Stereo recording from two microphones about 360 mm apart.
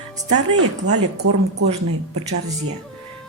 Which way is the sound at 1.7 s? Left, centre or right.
Centre.